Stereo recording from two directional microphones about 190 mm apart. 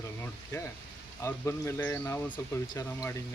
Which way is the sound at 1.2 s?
15° left (ahead or behind).